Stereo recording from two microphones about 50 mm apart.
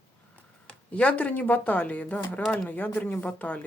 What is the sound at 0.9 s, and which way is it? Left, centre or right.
Speech, left.